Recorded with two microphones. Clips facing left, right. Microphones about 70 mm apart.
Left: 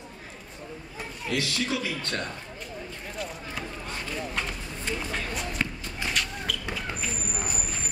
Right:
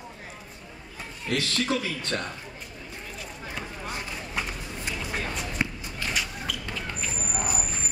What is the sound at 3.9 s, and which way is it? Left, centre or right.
Run, centre.